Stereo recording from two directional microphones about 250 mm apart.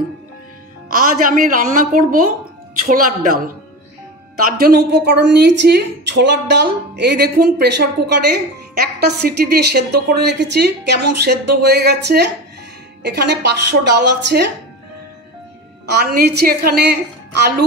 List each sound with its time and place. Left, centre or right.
0.9 s a woman's voice: right
4.6 s a woman's voice: right
16.0 s a woman's voice: right